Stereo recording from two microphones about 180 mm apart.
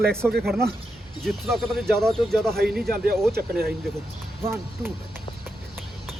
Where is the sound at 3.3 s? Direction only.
60° right (ahead or behind).